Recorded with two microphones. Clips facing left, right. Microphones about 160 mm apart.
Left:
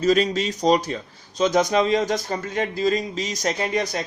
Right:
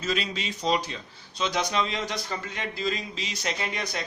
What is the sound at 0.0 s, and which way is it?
Speech, 40° left (ahead or behind).